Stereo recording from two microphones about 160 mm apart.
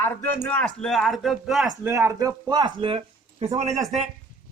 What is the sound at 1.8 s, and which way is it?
Speech, 15° right (ahead or behind).